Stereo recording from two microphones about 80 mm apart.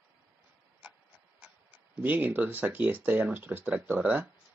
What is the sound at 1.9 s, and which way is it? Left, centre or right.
Speech, right.